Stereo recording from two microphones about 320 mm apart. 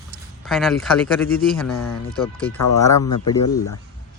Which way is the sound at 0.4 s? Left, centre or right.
Centre.